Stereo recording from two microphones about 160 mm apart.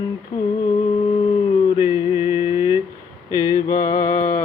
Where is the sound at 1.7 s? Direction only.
15° right (ahead or behind).